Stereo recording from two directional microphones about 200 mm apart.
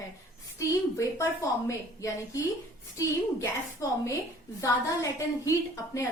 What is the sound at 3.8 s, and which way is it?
A woman's voice, 15° left (ahead or behind).